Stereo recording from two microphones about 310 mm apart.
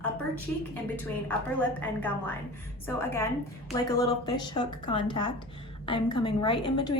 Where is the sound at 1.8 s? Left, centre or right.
Centre.